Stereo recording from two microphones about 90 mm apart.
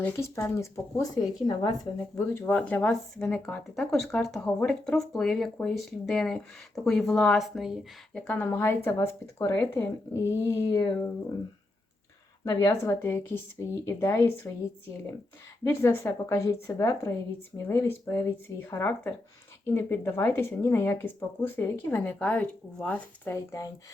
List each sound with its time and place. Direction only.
0.2 s speech: 35° left (ahead or behind)
1.5 s speech: 60° left (ahead or behind)
2.1 s speech: 30° left (ahead or behind)
2.6 s speech: 15° left (ahead or behind); by 7.8 s centre (ahead or behind)
8.1 s speech: 15° left (ahead or behind)
12.5 s speech: 35° left (ahead or behind)
15.6 s speech: 25° left (ahead or behind)
23.3 s speech: 30° left (ahead or behind)